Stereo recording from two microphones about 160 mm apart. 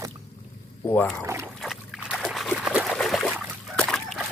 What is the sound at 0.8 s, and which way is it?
Speech, 10° left (ahead or behind).